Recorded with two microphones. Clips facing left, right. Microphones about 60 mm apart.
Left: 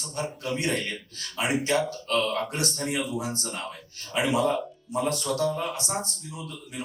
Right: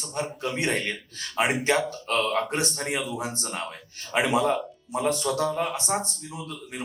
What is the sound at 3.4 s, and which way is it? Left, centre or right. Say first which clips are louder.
A man's voice: right 2 dB; right.